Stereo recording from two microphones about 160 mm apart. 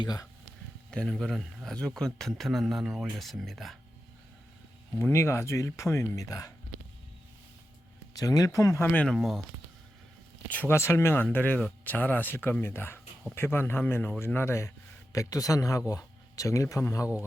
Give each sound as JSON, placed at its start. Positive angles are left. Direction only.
{"t": 0.0, "sound": "speech", "side_deg": 25}
{"t": 0.9, "sound": "speech", "side_deg": 5}
{"t": 4.9, "sound": "speech", "side_deg": 15}
{"t": 8.1, "sound": "speech", "side_deg": 20}
{"t": 9.1, "sound": "speech", "side_deg": 0}
{"t": 10.5, "sound": "speech", "side_deg": 10}